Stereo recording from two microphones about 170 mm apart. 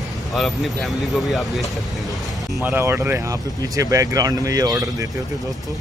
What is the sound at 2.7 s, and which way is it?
Speech, 15° right (ahead or behind).